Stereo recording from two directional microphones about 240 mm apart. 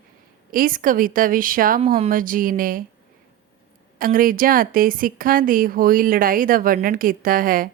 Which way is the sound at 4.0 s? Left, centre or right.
Right.